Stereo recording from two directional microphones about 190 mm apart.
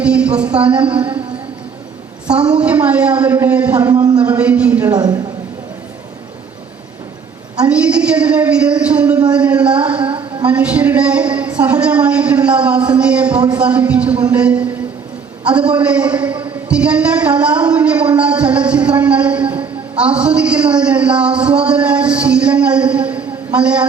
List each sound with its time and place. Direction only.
0.0 s a woman's voice: 5° right (ahead or behind)
0.8 s a woman's voice: 25° right (ahead or behind)
2.3 s speech: 5° right (ahead or behind)
3.9 s a woman's voice: 20° right (ahead or behind)
4.2 s speech: 5° right (ahead or behind)
4.9 s a woman's voice: 20° right (ahead or behind)
7.7 s a woman's voice: 5° right (ahead or behind)
9.7 s a woman's voice: 25° right (ahead or behind)
10.4 s a woman's voice: 5° right (ahead or behind)
21.4 s a sound: 5° right (ahead or behind)